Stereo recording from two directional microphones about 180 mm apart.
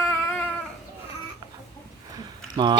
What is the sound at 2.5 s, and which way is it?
Speech, 25° right (ahead or behind).